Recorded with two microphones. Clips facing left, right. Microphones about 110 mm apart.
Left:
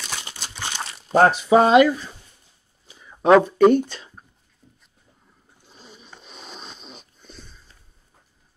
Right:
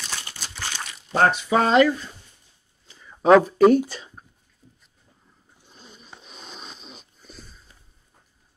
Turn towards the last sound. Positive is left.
turn(degrees=-5)  # may be behind; listen again after turning